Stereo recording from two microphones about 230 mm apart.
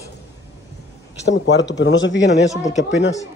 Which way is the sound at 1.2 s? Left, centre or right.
Left.